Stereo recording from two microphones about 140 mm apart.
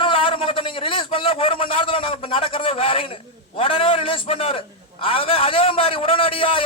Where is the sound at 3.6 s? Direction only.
40° left (ahead or behind).